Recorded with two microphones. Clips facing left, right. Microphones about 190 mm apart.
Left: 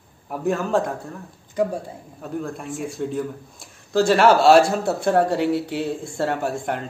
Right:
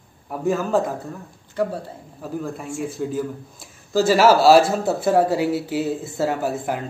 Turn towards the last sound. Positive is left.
turn(degrees=-5)  # may be behind; listen again after turning